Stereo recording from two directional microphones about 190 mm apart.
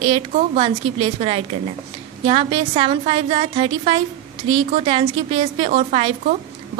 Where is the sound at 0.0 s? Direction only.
30° right (ahead or behind).